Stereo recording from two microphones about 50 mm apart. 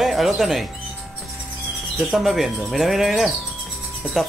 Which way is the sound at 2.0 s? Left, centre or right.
Centre.